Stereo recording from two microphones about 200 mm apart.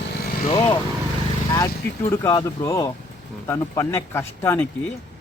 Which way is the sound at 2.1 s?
15° left (ahead or behind).